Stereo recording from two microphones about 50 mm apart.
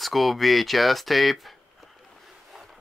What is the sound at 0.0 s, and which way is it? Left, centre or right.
Speech, centre.